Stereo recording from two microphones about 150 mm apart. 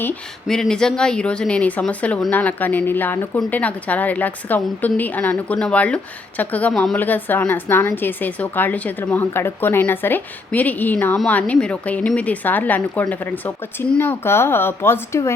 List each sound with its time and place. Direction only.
0.4 s speech: 5° left (ahead or behind)